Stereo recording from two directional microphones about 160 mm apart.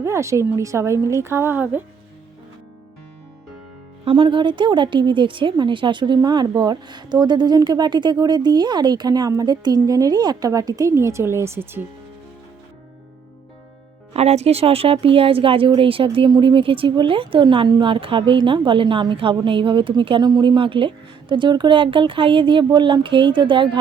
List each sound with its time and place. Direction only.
0.0 s a woman's voice: 20° right (ahead or behind)
4.0 s speech: 30° right (ahead or behind); by 11.9 s 15° right (ahead or behind)
14.1 s a woman's voice: 40° right (ahead or behind)